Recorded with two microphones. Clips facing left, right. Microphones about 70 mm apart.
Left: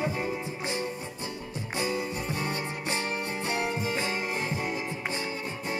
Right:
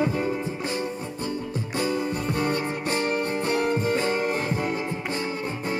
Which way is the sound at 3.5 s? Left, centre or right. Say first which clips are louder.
Right 6 dB; right.